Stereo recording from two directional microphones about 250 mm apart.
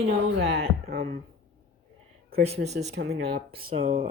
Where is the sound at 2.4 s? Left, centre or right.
Right.